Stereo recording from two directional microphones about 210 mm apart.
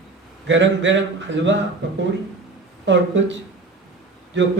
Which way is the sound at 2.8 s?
60° right (ahead or behind).